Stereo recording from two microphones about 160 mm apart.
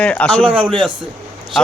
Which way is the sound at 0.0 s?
5° left (ahead or behind).